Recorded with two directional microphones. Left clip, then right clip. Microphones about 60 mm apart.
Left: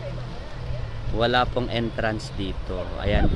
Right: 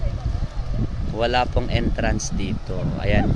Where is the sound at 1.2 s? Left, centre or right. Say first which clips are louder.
Right 1 dB; centre.